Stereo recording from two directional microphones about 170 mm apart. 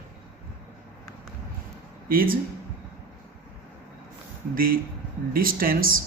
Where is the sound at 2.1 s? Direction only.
60° right (ahead or behind).